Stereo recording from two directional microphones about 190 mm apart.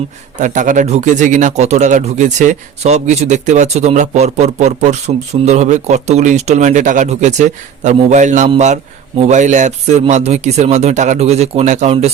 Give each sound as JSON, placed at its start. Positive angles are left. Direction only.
{"t": 0.3, "sound": "a man's voice", "side_deg": -40}